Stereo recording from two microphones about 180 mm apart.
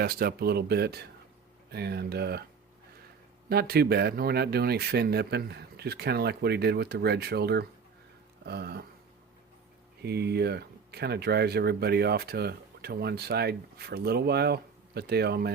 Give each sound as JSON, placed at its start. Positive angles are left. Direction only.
{"t": 0.0, "sound": "speech", "side_deg": -55}
{"t": 3.5, "sound": "speech", "side_deg": -60}
{"t": 10.0, "sound": "speech", "side_deg": -65}